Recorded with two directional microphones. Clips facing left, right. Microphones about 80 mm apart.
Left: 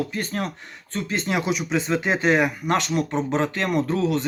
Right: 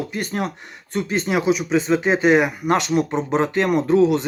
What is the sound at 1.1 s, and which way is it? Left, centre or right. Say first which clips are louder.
Speech: right 5 dB; centre.